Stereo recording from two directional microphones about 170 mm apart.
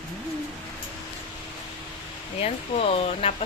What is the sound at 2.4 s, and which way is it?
Speech, 35° left (ahead or behind).